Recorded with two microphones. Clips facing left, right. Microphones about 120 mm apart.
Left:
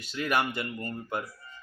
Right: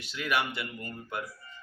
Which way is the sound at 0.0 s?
40° left (ahead or behind).